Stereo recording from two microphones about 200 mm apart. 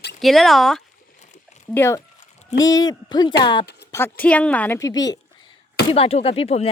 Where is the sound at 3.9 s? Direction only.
10° left (ahead or behind).